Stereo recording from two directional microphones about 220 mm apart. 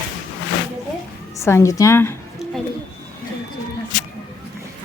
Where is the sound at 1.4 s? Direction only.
10° left (ahead or behind).